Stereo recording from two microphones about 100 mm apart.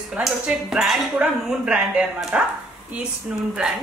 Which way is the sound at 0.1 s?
5° right (ahead or behind).